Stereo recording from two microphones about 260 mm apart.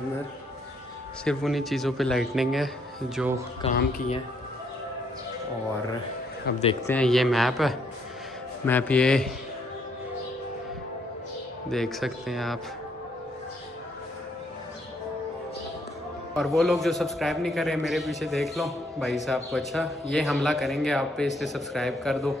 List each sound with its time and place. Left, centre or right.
1.2 s a man's voice: centre
3.6 s speech: left
6.5 s speech: left
6.9 s a man's voice: centre
11.7 s a man's voice: centre
16.3 s a man's voice: centre